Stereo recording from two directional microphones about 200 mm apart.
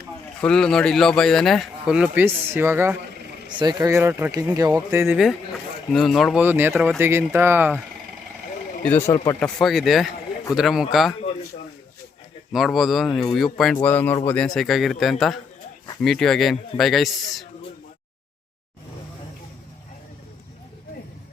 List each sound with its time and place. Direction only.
0.3 s speech: 5° left (ahead or behind); by 2.9 s 10° right (ahead or behind)
3.5 s speech: 20° right (ahead or behind)
5.1 s speech: centre (ahead or behind)
8.8 s speech: 10° left (ahead or behind)
9.6 s speech: centre (ahead or behind)
12.5 s speech: centre (ahead or behind)